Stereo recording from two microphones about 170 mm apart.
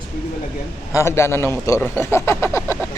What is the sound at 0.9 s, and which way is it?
A man's voice, 15° left (ahead or behind).